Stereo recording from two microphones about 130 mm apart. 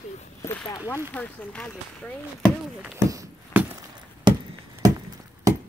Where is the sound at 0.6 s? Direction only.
25° left (ahead or behind).